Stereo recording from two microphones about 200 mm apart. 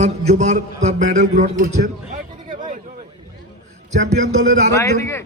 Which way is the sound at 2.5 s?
40° right (ahead or behind).